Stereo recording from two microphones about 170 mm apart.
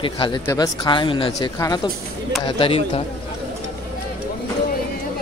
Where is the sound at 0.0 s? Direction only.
30° left (ahead or behind).